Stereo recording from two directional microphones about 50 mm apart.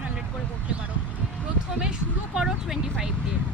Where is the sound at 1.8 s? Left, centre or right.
Centre.